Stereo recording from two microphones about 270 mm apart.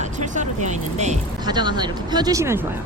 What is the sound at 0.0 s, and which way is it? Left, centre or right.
Speech, right.